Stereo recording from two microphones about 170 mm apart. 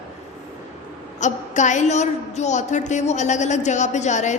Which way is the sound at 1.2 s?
45° left (ahead or behind).